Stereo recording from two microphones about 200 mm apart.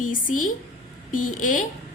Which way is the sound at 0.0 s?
40° left (ahead or behind).